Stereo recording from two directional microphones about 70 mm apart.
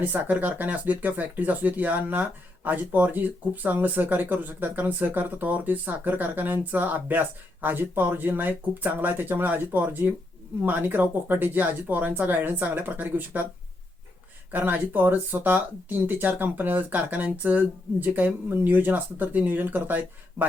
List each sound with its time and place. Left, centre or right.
0.0 s speech: right
14.5 s speech: right